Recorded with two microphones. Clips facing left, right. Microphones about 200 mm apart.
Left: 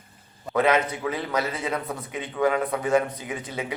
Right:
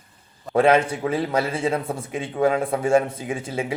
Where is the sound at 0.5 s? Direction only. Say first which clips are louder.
Right 4 dB; 30° right (ahead or behind).